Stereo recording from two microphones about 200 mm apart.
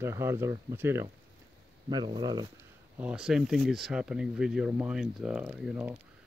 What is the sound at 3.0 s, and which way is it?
Speech, 5° right (ahead or behind).